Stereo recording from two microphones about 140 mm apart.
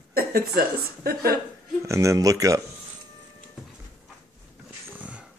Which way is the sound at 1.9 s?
20° right (ahead or behind).